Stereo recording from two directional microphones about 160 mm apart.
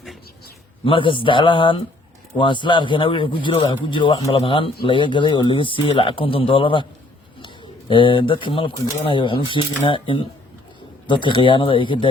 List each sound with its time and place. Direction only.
0.9 s a man's voice: 30° left (ahead or behind)